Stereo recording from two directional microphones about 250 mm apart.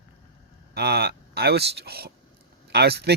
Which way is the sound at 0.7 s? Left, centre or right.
Right.